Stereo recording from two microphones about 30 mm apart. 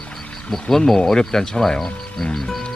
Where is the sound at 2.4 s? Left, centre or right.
Centre.